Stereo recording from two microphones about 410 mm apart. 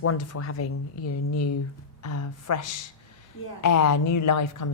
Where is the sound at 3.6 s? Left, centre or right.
Left.